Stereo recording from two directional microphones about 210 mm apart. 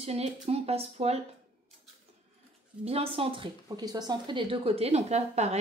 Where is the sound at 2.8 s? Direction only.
30° right (ahead or behind).